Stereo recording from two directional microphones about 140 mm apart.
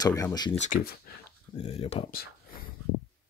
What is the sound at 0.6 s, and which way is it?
Speech, 65° left (ahead or behind).